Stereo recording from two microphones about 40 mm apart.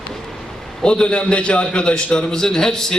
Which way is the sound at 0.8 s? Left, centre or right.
Left.